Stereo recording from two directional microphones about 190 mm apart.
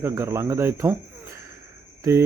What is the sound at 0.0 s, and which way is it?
Mantra, 15° right (ahead or behind).